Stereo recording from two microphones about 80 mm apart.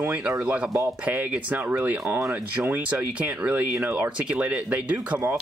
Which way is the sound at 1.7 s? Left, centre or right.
Right.